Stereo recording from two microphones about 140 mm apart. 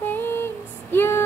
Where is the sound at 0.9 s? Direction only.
15° left (ahead or behind).